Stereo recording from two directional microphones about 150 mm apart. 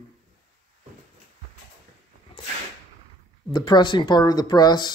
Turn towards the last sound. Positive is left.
turn(degrees=25)  # may be behind; listen again after turning